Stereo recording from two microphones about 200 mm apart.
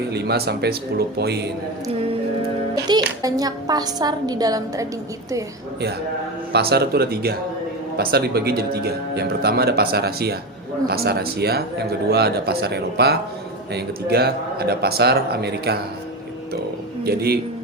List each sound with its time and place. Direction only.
0.1 s speech: 55° right (ahead or behind)
2.7 s a woman's voice: 20° right (ahead or behind)
6.5 s speech: 50° right (ahead or behind)
17.0 s a man's voice: 50° right (ahead or behind)